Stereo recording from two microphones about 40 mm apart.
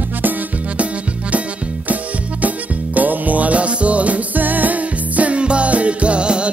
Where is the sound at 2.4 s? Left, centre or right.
Right.